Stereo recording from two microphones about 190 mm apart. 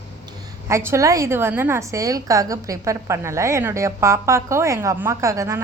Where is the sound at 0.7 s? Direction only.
15° right (ahead or behind).